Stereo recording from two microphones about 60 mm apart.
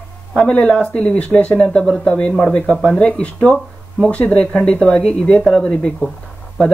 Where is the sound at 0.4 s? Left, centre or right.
Centre.